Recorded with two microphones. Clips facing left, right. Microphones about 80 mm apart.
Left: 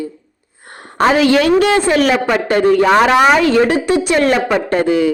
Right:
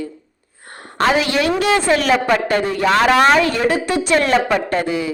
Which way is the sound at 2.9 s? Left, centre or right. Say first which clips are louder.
Right 2 dB; centre.